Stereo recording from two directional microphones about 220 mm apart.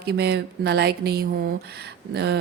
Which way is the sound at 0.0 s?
50° right (ahead or behind).